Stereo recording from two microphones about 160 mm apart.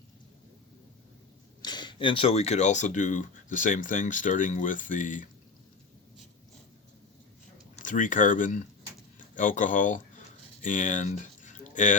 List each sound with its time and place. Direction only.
1.6 s speech: 25° left (ahead or behind); by 5.3 s 55° left (ahead or behind)
7.9 s speech: 55° left (ahead or behind)
10.6 s a sound: 55° left (ahead or behind)